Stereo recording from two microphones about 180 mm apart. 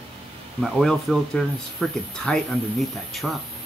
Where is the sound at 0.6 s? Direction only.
Centre (ahead or behind).